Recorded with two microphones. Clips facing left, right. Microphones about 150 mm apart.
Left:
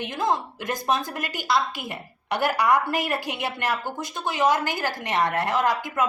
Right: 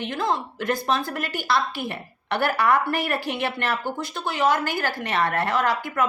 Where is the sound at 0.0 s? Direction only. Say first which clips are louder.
Even; 20° left (ahead or behind).